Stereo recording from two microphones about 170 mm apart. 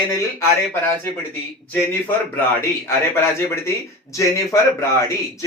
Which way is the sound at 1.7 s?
10° left (ahead or behind).